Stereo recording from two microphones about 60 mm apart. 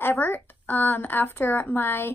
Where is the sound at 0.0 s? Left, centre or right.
Left.